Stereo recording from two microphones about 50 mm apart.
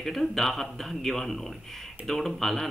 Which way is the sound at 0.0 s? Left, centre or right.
Centre.